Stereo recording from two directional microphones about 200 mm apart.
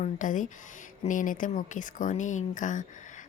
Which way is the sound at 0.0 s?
40° left (ahead or behind).